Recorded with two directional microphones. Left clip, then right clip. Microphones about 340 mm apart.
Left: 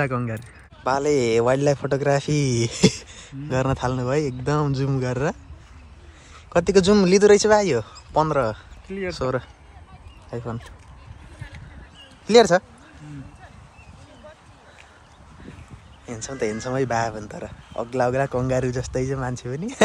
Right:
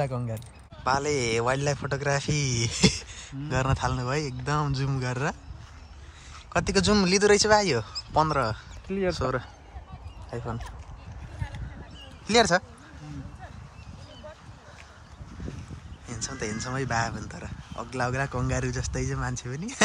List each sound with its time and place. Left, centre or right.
0.0 s a man's voice: centre
6.5 s speech: centre
8.8 s speech: right
9.1 s a man's voice: centre
12.3 s speech: centre
16.1 s a man's voice: centre